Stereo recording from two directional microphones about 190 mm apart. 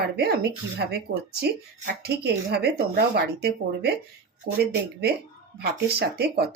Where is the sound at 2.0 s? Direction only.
60° right (ahead or behind).